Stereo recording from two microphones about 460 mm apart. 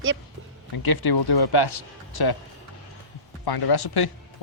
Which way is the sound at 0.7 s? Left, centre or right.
Left.